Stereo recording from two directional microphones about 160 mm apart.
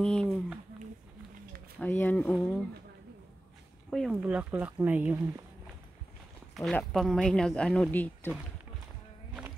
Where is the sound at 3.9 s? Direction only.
Centre (ahead or behind).